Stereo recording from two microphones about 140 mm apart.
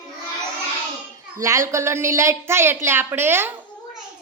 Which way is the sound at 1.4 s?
20° right (ahead or behind).